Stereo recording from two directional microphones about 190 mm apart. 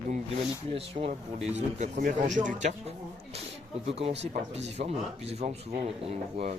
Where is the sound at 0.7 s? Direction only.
30° right (ahead or behind).